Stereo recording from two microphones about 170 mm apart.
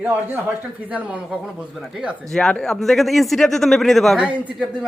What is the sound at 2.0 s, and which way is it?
Speech, centre (ahead or behind).